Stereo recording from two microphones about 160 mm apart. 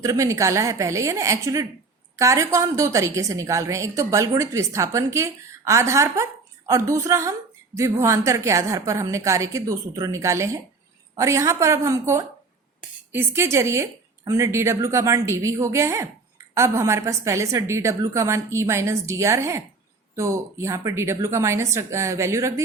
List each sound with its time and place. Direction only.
0.0 s a woman's voice: 20° right (ahead or behind)